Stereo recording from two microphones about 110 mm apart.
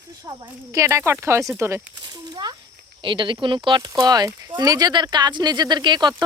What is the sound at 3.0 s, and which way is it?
Speech, 50° right (ahead or behind).